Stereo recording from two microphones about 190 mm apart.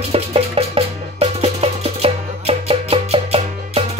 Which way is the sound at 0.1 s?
30° right (ahead or behind).